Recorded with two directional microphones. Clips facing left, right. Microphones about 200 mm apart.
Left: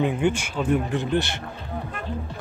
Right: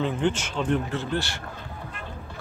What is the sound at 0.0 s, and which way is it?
Speech, 10° left (ahead or behind).